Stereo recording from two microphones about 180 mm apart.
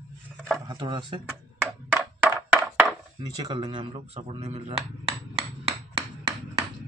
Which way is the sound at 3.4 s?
25° right (ahead or behind).